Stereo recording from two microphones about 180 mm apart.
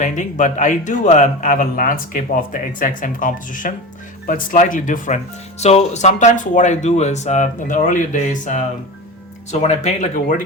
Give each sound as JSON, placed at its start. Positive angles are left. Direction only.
{"t": 0.0, "sound": "a man's voice", "side_deg": 45}